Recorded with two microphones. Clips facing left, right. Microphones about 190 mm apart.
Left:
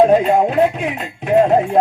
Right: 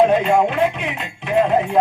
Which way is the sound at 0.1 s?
35° left (ahead or behind).